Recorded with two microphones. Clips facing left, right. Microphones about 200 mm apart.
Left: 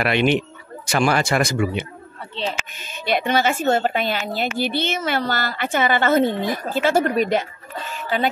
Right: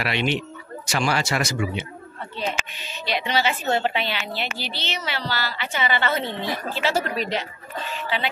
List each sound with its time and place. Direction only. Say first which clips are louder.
0.0 s speech: left 6 dB; 55° left (ahead or behind)